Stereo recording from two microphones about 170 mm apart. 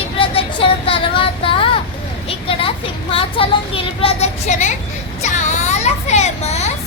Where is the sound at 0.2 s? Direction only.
30° left (ahead or behind).